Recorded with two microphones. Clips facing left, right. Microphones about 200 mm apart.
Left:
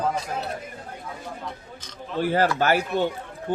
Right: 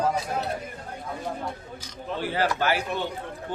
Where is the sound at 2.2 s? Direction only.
45° left (ahead or behind).